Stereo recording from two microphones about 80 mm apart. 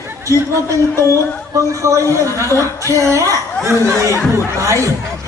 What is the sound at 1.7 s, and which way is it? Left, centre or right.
A woman's voice, right.